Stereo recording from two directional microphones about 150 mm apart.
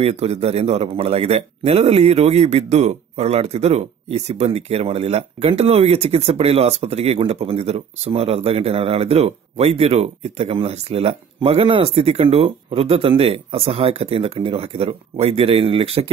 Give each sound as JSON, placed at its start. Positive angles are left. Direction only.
{"t": 0.0, "sound": "a man's voice", "side_deg": -45}